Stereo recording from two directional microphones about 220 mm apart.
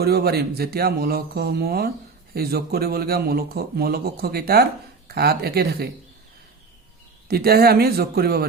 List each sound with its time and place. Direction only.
0.0 s a man's voice: 45° right (ahead or behind)
7.3 s a man's voice: 45° right (ahead or behind)